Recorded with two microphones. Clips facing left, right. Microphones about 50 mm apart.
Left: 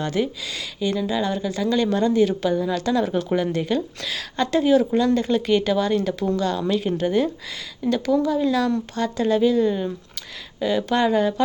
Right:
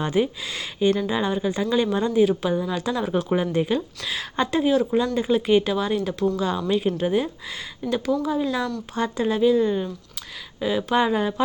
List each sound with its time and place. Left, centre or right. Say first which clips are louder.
0.0 s speech: right 1 dB; centre
0.8 s speech: right 2 dB; right
4.6 s speech: left 4 dB; centre
4.9 s speech: left 2 dB; centre